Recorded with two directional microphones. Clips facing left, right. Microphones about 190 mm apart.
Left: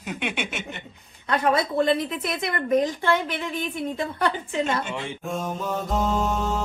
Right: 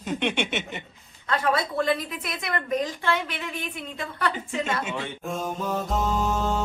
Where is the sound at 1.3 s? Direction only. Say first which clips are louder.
Left 3 dB; 20° left (ahead or behind).